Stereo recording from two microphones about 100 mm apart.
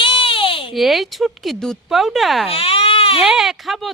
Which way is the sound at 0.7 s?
Centre (ahead or behind).